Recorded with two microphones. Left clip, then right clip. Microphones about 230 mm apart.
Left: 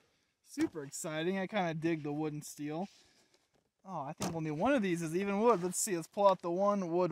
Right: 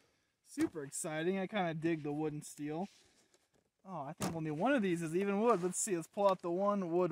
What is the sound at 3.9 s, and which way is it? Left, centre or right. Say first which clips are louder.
Speech: left 2 dB; left.